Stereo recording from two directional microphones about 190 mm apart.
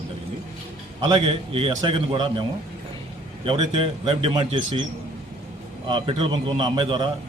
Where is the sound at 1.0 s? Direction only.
25° right (ahead or behind).